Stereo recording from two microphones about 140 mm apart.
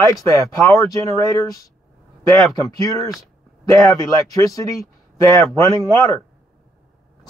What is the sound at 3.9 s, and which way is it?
Speech, 25° left (ahead or behind).